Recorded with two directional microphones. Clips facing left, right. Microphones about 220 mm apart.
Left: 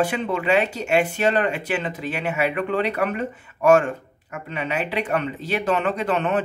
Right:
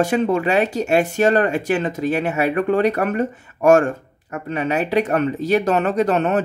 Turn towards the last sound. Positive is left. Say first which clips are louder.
# right 5 dB
turn(degrees=-40)  # may be behind; listen again after turning